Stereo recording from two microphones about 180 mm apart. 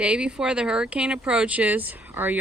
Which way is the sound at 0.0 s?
5° right (ahead or behind).